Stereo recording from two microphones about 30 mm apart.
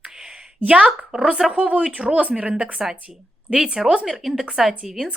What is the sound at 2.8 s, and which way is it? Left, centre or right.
Speech, centre.